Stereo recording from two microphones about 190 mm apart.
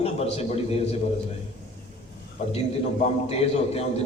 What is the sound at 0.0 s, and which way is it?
Speech, 35° left (ahead or behind).